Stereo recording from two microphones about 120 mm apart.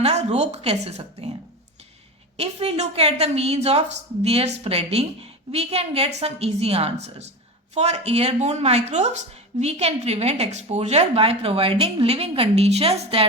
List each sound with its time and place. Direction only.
0.0 s a woman's voice: 65° right (ahead or behind)
2.4 s speech: 60° right (ahead or behind)